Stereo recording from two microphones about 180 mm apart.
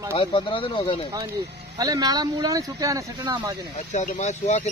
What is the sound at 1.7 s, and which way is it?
Speech, 20° right (ahead or behind).